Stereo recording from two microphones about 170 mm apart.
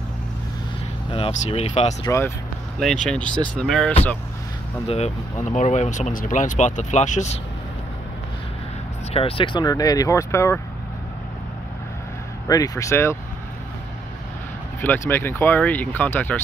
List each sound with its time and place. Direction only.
1.1 s speech: 35° left (ahead or behind)
2.0 s speech: 15° left (ahead or behind)
2.8 s speech: 5° left (ahead or behind)
4.8 s speech: 40° left (ahead or behind)
9.1 s speech: 30° left (ahead or behind); by 10.6 s 15° left (ahead or behind)
12.4 s speech: 20° left (ahead or behind)
14.8 s speech: 10° left (ahead or behind)